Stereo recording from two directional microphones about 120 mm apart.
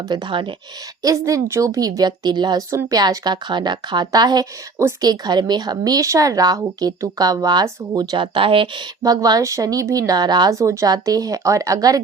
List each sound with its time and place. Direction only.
0.1 s speech: 40° right (ahead or behind)
1.0 s speech: 25° right (ahead or behind)